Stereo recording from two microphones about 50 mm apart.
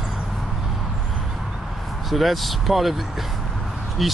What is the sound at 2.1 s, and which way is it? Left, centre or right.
Speech, centre.